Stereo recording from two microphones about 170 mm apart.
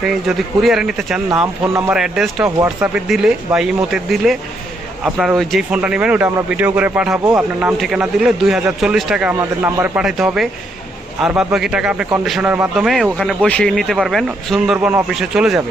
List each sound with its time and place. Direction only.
0.0 s a man's voice: centre (ahead or behind)
2.6 s speech: 20° right (ahead or behind)
3.1 s a man's voice: 5° right (ahead or behind)
9.3 s a man's voice: 15° right (ahead or behind)